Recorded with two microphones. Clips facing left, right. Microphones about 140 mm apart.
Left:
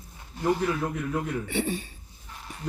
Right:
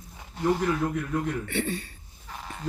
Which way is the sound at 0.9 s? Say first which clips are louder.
Right 1 dB; 10° left (ahead or behind).